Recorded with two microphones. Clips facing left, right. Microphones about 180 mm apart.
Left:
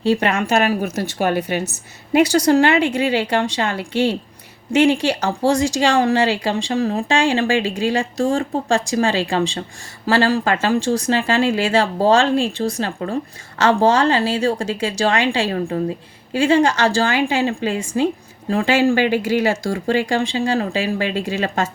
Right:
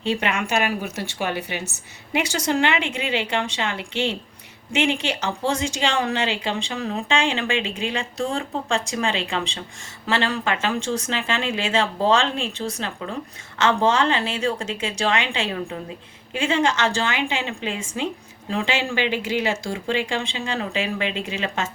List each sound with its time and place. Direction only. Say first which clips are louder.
0.0 s speech: left 6 dB; 40° left (ahead or behind)